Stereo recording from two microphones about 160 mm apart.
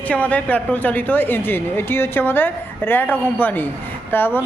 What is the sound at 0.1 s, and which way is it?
Speech, 10° left (ahead or behind).